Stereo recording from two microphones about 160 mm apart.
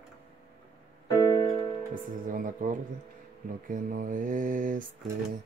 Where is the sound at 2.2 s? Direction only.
55° right (ahead or behind).